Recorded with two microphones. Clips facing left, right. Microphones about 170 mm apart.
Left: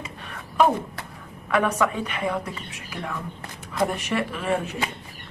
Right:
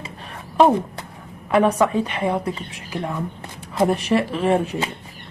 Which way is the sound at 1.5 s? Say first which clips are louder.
Right 5 dB; 30° right (ahead or behind).